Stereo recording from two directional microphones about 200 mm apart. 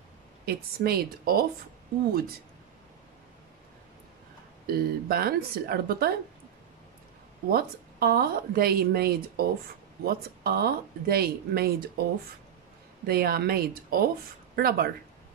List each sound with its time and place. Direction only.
0.5 s a woman's voice: 50° right (ahead or behind)
4.6 s a woman's voice: 50° right (ahead or behind)
7.4 s a woman's voice: 50° right (ahead or behind)
13.0 s a woman's voice: 50° right (ahead or behind)